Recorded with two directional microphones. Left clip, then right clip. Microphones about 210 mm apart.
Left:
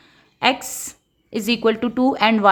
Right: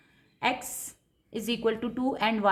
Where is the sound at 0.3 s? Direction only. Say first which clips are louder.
Left 10 dB; 35° left (ahead or behind).